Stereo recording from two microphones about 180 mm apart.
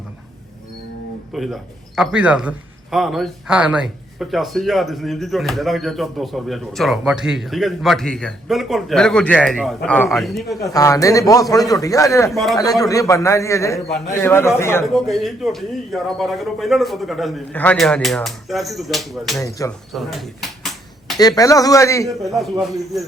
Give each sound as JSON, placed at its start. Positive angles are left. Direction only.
{"t": 1.3, "sound": "speech", "side_deg": 0}
{"t": 10.7, "sound": "a man's voice", "side_deg": 20}
{"t": 12.3, "sound": "speech", "side_deg": 0}
{"t": 12.8, "sound": "a man's voice", "side_deg": 20}
{"t": 14.9, "sound": "speech", "side_deg": 0}
{"t": 19.4, "sound": "a man's voice", "side_deg": 20}
{"t": 19.9, "sound": "a sound", "side_deg": 0}
{"t": 21.2, "sound": "a man's voice", "side_deg": 20}
{"t": 22.3, "sound": "speech", "side_deg": 0}